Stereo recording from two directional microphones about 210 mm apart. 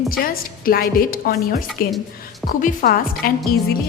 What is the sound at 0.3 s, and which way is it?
Speech, 45° left (ahead or behind).